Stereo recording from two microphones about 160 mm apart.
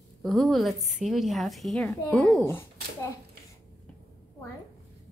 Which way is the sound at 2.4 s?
15° left (ahead or behind).